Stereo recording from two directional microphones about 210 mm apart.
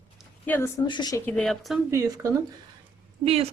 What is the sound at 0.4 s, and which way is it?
Speech, 10° left (ahead or behind).